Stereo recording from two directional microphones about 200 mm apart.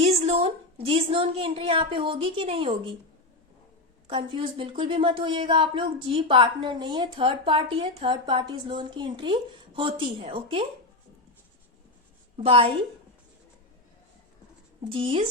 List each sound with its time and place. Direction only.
0.0 s a woman's voice: 30° right (ahead or behind)
4.0 s a woman's voice: 30° right (ahead or behind)
12.4 s a woman's voice: 30° right (ahead or behind)
14.8 s a woman's voice: 25° right (ahead or behind)